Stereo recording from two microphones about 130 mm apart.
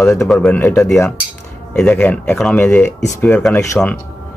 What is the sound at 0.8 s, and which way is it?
Speech, 20° left (ahead or behind).